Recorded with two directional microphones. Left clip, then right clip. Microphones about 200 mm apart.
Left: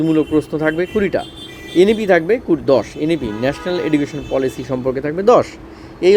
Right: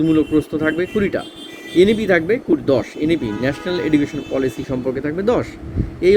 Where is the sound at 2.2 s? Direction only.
Centre (ahead or behind).